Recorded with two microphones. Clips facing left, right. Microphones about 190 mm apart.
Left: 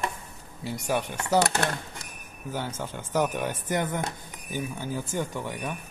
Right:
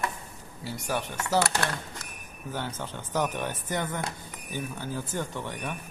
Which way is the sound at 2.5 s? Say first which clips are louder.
Left 2 dB; 10° left (ahead or behind).